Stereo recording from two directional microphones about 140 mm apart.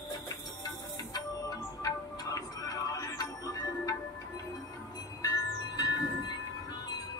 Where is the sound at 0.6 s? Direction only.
25° left (ahead or behind).